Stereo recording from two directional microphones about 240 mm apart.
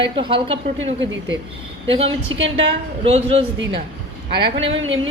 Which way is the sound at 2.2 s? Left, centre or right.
Right.